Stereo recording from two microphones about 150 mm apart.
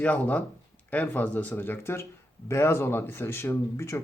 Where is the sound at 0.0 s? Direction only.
10° left (ahead or behind).